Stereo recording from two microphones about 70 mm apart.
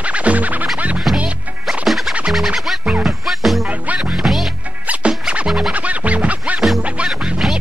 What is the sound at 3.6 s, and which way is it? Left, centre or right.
Music, centre.